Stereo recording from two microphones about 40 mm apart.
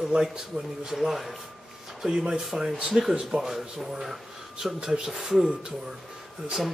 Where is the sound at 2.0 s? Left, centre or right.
Centre.